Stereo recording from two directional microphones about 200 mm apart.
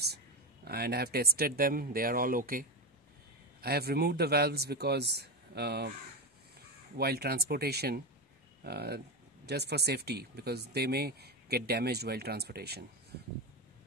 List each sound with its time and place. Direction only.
0.7 s speech: 50° right (ahead or behind)
3.6 s speech: 50° right (ahead or behind)
7.0 s speech: 50° right (ahead or behind)